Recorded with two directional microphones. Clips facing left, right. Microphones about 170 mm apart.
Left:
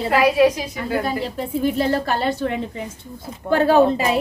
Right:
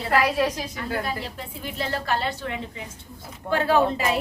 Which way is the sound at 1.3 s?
40° left (ahead or behind).